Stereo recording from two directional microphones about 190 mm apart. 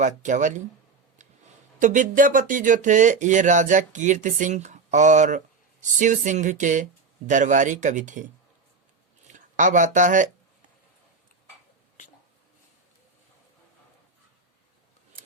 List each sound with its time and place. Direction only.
0.0 s speech: 40° right (ahead or behind)
1.8 s speech: 40° right (ahead or behind)